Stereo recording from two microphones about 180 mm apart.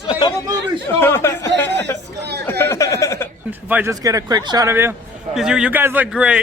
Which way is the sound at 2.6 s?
15° left (ahead or behind).